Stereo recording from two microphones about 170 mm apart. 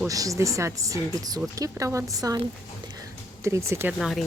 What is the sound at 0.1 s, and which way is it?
Speech, 20° right (ahead or behind).